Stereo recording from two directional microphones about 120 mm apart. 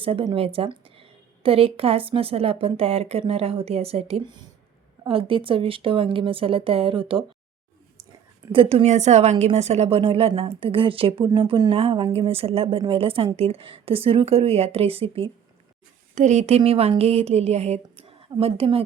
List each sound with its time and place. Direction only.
0.0 s a woman's voice: 45° right (ahead or behind)
4.2 s speech: 40° right (ahead or behind)
5.0 s a woman's voice: 50° right (ahead or behind)
8.5 s a woman's voice: 50° right (ahead or behind)
8.9 s a woman's voice: 70° right (ahead or behind); by 11.3 s 50° right (ahead or behind)
11.4 s speech: 35° right (ahead or behind)
11.7 s a woman's voice: 50° right (ahead or behind)
16.1 s a woman's voice: 80° right; by 18.9 s 50° right (ahead or behind)